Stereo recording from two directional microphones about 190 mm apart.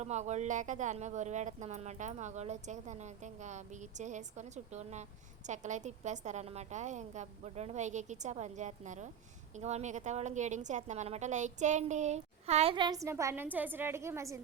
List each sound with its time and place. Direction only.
0.0 s speech: 35° right (ahead or behind); by 14.4 s 15° right (ahead or behind)